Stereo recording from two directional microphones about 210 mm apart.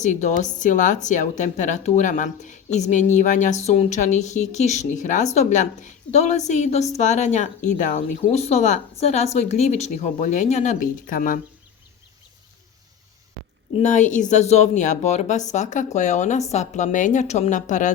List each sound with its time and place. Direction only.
0.0 s speech: 35° left (ahead or behind)
13.8 s speech: 35° left (ahead or behind)